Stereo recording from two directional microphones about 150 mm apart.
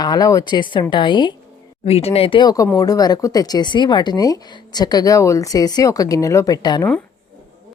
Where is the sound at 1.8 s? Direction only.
40° left (ahead or behind).